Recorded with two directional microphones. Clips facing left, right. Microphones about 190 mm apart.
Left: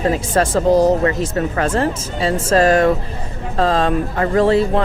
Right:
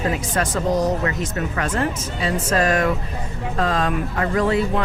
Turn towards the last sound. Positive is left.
turn(degrees=30)  # may be behind; listen again after turning